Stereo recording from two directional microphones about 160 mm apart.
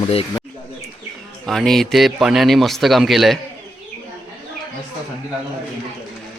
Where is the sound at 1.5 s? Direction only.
Centre (ahead or behind).